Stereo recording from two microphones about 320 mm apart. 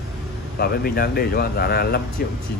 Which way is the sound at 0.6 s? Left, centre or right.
Left.